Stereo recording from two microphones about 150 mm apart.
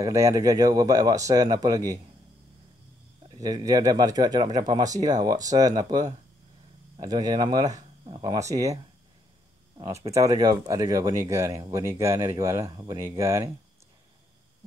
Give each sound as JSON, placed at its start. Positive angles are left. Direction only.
{"t": 0.0, "sound": "speech", "side_deg": -20}
{"t": 3.3, "sound": "speech", "side_deg": -25}
{"t": 9.8, "sound": "speech", "side_deg": -25}